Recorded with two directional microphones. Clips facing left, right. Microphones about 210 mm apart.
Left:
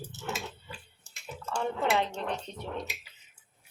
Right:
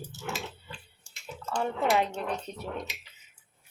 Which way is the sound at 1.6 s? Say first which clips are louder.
Right 2 dB; 10° right (ahead or behind).